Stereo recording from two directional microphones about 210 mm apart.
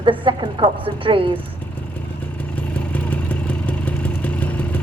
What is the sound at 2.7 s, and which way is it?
Vehicle, 5° left (ahead or behind).